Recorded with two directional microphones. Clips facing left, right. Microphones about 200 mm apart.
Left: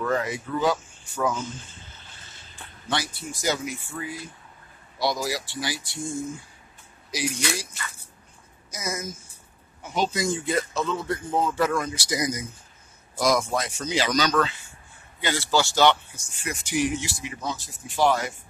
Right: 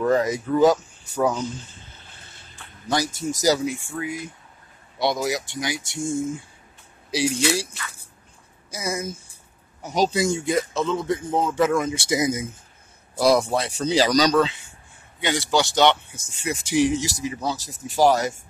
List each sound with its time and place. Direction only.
0.0 s speech: 40° right (ahead or behind)
2.9 s speech: 40° right (ahead or behind)
4.0 s a man's voice: 15° right (ahead or behind)
8.6 s a woman's voice: 30° right (ahead or behind)
10.3 s a man's voice: 15° right (ahead or behind); by 14.3 s 35° right (ahead or behind)
15.1 s speech: 15° right (ahead or behind); by 18.4 s 40° right (ahead or behind)